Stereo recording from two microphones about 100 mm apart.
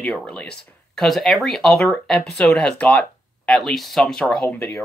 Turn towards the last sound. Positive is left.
turn(degrees=5)  # may be behind; listen again after turning